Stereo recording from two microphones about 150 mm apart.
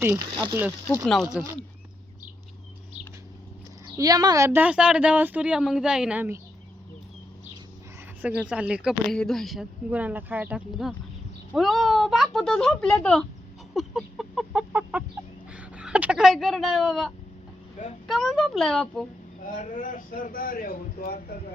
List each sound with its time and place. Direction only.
0.0 s speech: 20° right (ahead or behind)
1.0 s speech: 5° left (ahead or behind)
3.9 s a woman's voice: 25° right (ahead or behind)
8.2 s speech: 5° right (ahead or behind)
9.9 s a woman's voice: 10° right (ahead or behind); by 13.2 s 5° left (ahead or behind)
13.7 s chicken: centre (ahead or behind)
15.5 s a sound: 10° right (ahead or behind)
17.8 s speech: 55° left (ahead or behind)
18.1 s speech: centre (ahead or behind)
19.5 s a man's voice: 60° left (ahead or behind); by 21.3 s 85° left